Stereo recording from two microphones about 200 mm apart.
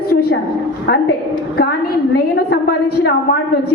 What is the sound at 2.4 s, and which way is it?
Speech, 50° left (ahead or behind).